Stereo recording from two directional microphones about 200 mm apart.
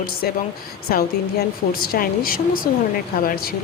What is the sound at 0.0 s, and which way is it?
Speech, 50° left (ahead or behind).